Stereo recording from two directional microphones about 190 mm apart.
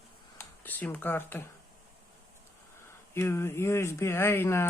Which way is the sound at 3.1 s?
15° left (ahead or behind).